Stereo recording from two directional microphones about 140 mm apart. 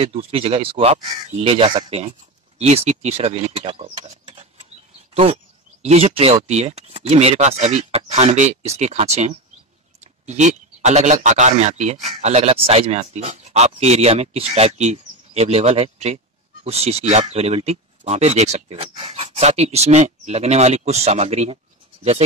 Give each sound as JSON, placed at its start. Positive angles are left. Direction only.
{"t": 0.0, "sound": "speech", "side_deg": -45}
{"t": 5.8, "sound": "speech", "side_deg": -50}